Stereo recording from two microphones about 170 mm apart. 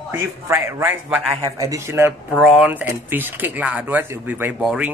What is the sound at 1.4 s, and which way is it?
Speech, 20° right (ahead or behind).